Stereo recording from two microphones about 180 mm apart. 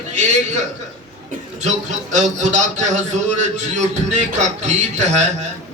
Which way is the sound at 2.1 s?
40° right (ahead or behind).